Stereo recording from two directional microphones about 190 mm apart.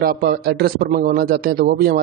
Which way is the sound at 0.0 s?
55° right (ahead or behind).